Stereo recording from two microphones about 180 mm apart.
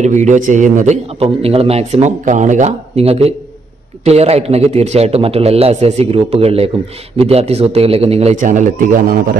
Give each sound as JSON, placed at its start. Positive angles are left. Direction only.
{"t": 0.0, "sound": "a man's voice", "side_deg": -40}